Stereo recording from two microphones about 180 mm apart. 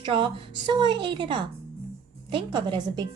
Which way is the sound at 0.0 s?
30° right (ahead or behind).